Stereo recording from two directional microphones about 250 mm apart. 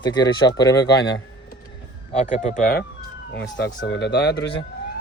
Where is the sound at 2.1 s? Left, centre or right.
Left.